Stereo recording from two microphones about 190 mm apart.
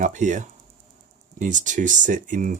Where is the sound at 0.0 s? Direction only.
40° right (ahead or behind).